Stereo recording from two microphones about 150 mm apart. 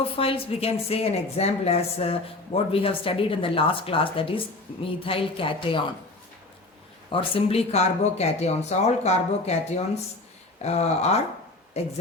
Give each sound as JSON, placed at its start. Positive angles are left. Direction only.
{"t": 0.2, "sound": "a woman's voice", "side_deg": 40}
{"t": 7.1, "sound": "speech", "side_deg": 35}